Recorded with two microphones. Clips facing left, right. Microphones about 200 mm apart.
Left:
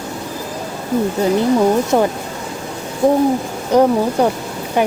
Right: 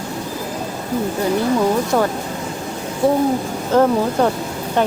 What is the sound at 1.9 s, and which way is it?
Speech, 20° left (ahead or behind).